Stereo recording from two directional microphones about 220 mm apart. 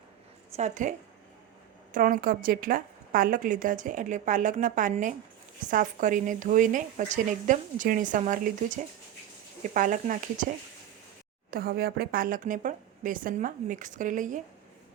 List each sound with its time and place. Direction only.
0.5 s a woman's voice: 35° right (ahead or behind)
11.5 s a woman's voice: 40° right (ahead or behind)